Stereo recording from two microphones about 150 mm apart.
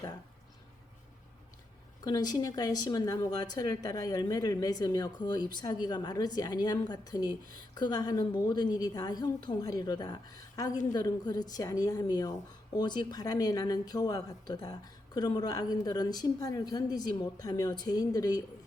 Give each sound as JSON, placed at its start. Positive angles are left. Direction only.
{"t": 2.0, "sound": "speech", "side_deg": 25}